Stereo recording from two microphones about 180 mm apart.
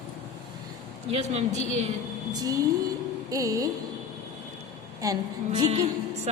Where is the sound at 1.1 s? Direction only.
35° right (ahead or behind).